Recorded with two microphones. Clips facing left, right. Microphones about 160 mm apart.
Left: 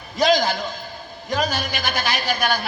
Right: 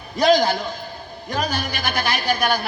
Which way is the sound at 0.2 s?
60° right (ahead or behind).